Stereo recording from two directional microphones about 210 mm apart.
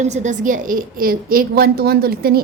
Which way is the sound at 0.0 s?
35° right (ahead or behind).